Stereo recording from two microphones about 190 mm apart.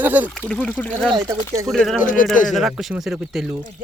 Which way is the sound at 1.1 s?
20° right (ahead or behind).